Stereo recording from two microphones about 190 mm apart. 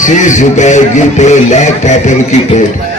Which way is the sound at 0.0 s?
40° left (ahead or behind).